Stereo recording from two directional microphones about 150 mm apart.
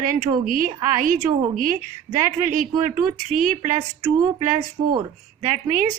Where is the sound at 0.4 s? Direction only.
65° right (ahead or behind).